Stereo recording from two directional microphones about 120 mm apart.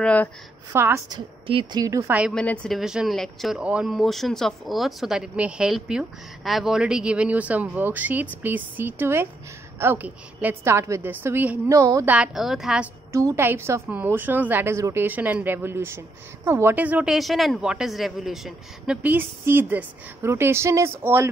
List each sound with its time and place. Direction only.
0.0 s a woman's voice: 10° left (ahead or behind)
0.7 s a woman's voice: 20° right (ahead or behind)
1.1 s a woman's voice: 40° right (ahead or behind)
1.8 s a woman's voice: 25° right (ahead or behind)
2.3 s a woman's voice: 10° left (ahead or behind)
2.8 s a woman's voice: 5° right (ahead or behind)
11.8 s a woman's voice: 25° right (ahead or behind)
12.1 s a woman's voice: 5° right (ahead or behind)
13.1 s a woman's voice: 25° right (ahead or behind)
17.1 s a woman's voice: centre (ahead or behind)
19.0 s a woman's voice: 15° right (ahead or behind)